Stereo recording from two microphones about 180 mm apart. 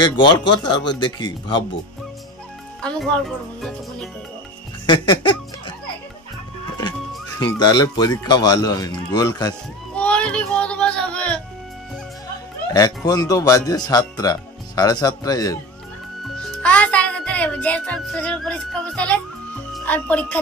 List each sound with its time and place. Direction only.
0.0 s speech: 25° left (ahead or behind)
2.8 s speech: 5° left (ahead or behind)
4.8 s laughter: 25° left (ahead or behind)
7.3 s speech: 25° left (ahead or behind)
9.9 s music: 5° left (ahead or behind)
12.7 s speech: 20° left (ahead or behind)
16.6 s music: 5° left (ahead or behind)
19.7 s speech: 10° left (ahead or behind)